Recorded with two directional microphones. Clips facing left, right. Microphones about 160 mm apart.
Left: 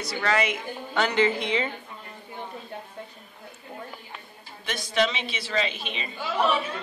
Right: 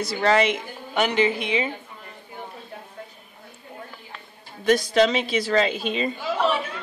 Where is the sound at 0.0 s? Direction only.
30° right (ahead or behind).